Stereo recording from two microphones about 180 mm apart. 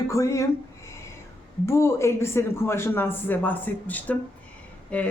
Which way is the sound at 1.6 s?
15° left (ahead or behind).